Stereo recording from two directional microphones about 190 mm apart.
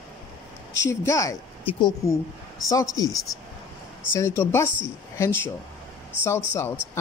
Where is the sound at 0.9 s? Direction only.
15° left (ahead or behind).